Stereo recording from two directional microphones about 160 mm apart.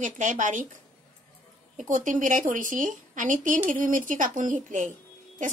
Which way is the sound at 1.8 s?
55° right (ahead or behind).